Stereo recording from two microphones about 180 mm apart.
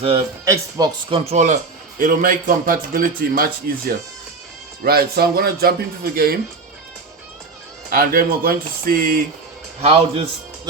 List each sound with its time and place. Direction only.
0.4 s speech: 15° right (ahead or behind)
1.1 s a man's voice: 35° right (ahead or behind)
2.0 s a man's voice: 50° right (ahead or behind)
7.9 s a man's voice: 55° right (ahead or behind)
9.8 s a man's voice: 35° right (ahead or behind)